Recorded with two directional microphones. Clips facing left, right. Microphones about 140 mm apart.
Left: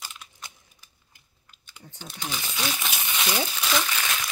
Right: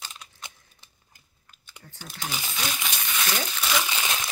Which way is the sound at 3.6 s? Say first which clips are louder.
Right 1 dB; 5° right (ahead or behind).